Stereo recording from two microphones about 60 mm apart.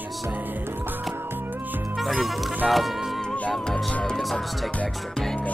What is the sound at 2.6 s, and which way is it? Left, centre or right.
Speech, centre.